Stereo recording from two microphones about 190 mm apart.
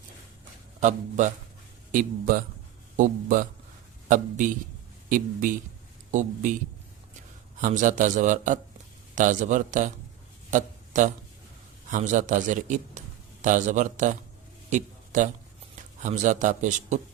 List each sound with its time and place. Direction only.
0.8 s a man's voice: 40° right (ahead or behind)
7.6 s a man's voice: 40° right (ahead or behind)
10.5 s a sound: 40° right (ahead or behind)
11.9 s a man's voice: 40° right (ahead or behind)
14.7 s a sound: 40° right (ahead or behind)
16.0 s a man's voice: 40° right (ahead or behind)